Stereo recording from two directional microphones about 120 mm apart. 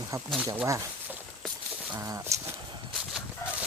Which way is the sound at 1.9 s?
25° right (ahead or behind).